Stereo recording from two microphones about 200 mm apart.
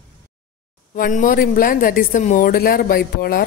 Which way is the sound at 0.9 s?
40° left (ahead or behind).